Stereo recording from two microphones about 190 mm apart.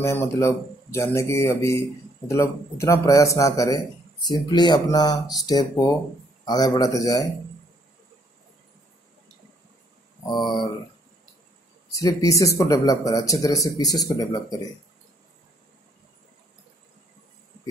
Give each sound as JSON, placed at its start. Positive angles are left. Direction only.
{"t": 0.0, "sound": "a man's voice", "side_deg": 15}
{"t": 10.2, "sound": "a man's voice", "side_deg": 25}
{"t": 11.9, "sound": "speech", "side_deg": 15}